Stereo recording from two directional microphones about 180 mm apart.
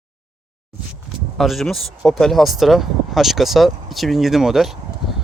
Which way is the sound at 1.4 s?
Centre (ahead or behind).